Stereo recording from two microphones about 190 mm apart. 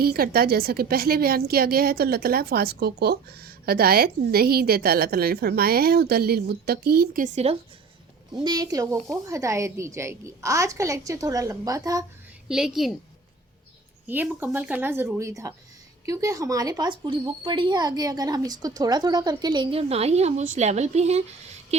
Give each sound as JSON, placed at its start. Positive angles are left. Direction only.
{"t": 0.0, "sound": "a woman's voice", "side_deg": -55}
{"t": 8.4, "sound": "a woman's voice", "side_deg": -20}
{"t": 12.5, "sound": "a woman's voice", "side_deg": -5}
{"t": 14.1, "sound": "a woman's voice", "side_deg": -10}